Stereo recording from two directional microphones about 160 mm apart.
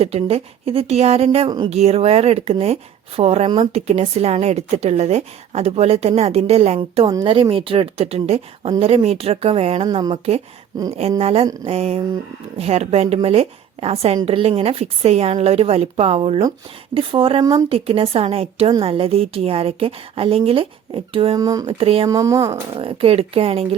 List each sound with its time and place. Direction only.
0.0 s speech: 40° right (ahead or behind)
1.5 s speech: 25° right (ahead or behind)
1.7 s speech: 40° right (ahead or behind)
9.8 s speech: 25° right (ahead or behind)
10.1 s speech: 40° right (ahead or behind)
21.3 s speech: 20° right (ahead or behind)
21.7 s speech: 35° right (ahead or behind)
22.1 s speech: 20° right (ahead or behind)
22.7 s speech: 35° right (ahead or behind)